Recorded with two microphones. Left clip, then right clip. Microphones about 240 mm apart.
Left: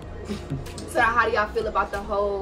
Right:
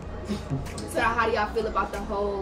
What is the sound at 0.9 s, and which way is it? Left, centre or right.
Speech, centre.